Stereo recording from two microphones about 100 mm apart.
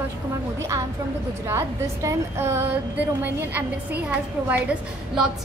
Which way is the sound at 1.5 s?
30° right (ahead or behind).